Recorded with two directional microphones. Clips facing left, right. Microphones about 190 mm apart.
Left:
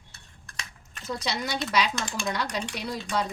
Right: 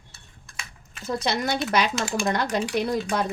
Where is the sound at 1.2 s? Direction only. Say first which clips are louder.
Right 5 dB; 55° right (ahead or behind).